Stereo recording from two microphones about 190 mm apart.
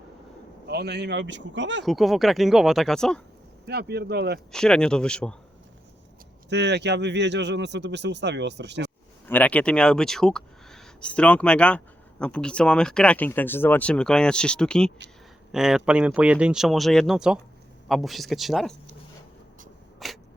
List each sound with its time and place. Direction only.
0.7 s speech: 60° right (ahead or behind)
1.8 s speech: centre (ahead or behind)
3.7 s speech: 60° right (ahead or behind)
4.5 s speech: 5° left (ahead or behind)
6.5 s speech: 65° right (ahead or behind)
9.2 s speech: 10° left (ahead or behind)
20.0 s a sound: centre (ahead or behind)